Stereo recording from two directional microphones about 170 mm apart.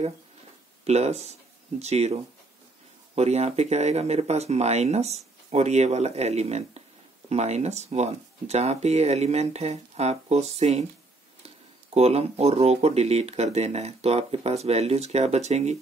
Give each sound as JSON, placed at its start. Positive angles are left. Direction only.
{"t": 0.8, "sound": "speech", "side_deg": -40}
{"t": 3.2, "sound": "speech", "side_deg": -40}